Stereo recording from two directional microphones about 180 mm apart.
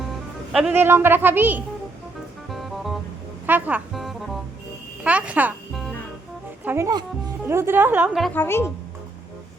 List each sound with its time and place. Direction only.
0.5 s a woman's voice: 10° right (ahead or behind)
2.5 s music: centre (ahead or behind)
6.7 s a woman's voice: 15° right (ahead or behind)
8.3 s a woman's voice: 10° left (ahead or behind)